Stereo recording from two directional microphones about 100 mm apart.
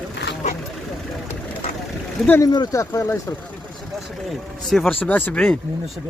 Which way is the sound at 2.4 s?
40° left (ahead or behind).